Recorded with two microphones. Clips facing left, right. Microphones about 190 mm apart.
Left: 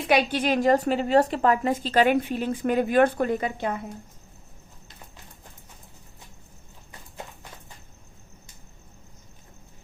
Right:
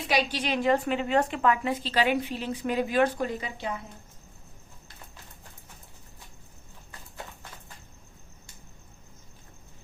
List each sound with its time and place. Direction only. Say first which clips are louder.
0.1 s a woman's voice: left 5 dB; 55° left (ahead or behind)